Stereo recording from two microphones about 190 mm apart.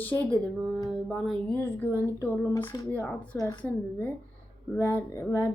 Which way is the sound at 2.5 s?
10° left (ahead or behind).